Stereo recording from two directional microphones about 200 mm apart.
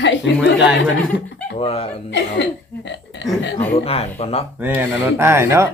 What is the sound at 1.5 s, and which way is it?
Speech, 30° left (ahead or behind).